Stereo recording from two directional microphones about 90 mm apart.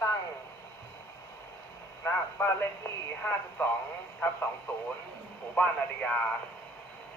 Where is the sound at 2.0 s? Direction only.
25° left (ahead or behind).